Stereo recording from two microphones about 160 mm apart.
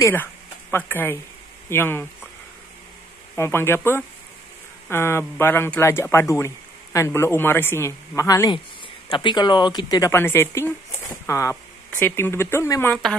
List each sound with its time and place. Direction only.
0.0 s speech: 15° left (ahead or behind)
3.3 s speech: 15° left (ahead or behind)